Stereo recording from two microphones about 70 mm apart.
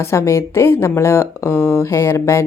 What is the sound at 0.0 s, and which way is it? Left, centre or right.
Speech, left.